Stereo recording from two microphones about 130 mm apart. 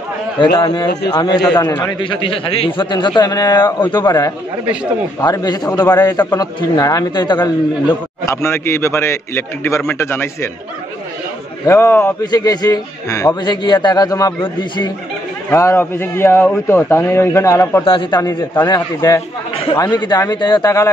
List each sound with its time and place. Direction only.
0.4 s a man's voice: 35° left (ahead or behind)
8.3 s a man's voice: 20° left (ahead or behind)
11.6 s a man's voice: 20° left (ahead or behind)
12.3 s a man's voice: 30° left (ahead or behind)
15.5 s a man's voice: 20° left (ahead or behind)
17.8 s a man's voice: 40° left (ahead or behind)